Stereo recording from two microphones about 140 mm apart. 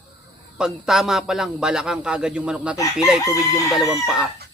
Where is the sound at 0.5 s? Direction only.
5° right (ahead or behind).